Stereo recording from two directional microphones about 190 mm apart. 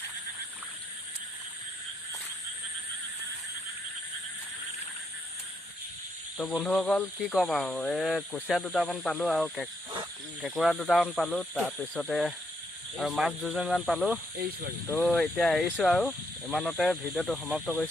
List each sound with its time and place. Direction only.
6.6 s speech: 5° left (ahead or behind)